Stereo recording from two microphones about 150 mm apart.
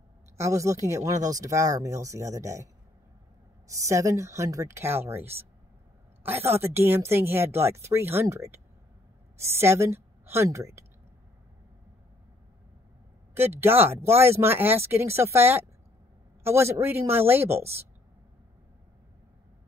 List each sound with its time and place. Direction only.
0.4 s a woman's voice: 20° right (ahead or behind)
13.3 s speech: 15° right (ahead or behind)